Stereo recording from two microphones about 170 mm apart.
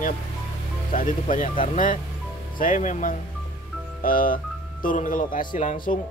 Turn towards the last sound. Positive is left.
turn(degrees=50)  # may be behind; listen again after turning